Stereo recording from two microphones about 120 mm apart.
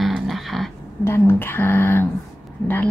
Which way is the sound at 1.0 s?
20° left (ahead or behind).